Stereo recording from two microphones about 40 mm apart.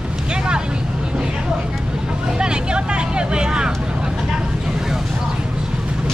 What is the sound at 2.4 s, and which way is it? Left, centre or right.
Speech, right.